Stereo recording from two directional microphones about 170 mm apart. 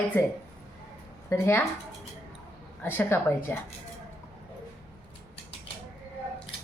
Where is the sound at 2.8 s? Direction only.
10° left (ahead or behind).